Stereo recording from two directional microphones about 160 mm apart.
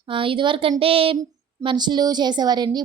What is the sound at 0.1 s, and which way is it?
A woman's voice, 35° right (ahead or behind).